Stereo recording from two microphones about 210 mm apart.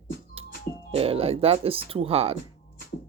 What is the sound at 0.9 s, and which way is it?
Speech, 25° right (ahead or behind).